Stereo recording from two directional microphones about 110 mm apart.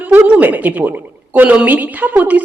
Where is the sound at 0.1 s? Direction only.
15° right (ahead or behind).